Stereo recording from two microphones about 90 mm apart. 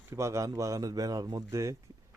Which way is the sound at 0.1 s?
35° right (ahead or behind).